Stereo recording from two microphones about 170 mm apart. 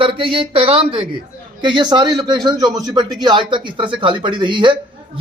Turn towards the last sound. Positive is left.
turn(degrees=-30)  # may be behind; listen again after turning